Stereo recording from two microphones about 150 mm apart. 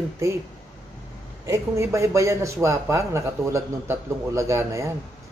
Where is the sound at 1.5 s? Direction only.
20° right (ahead or behind).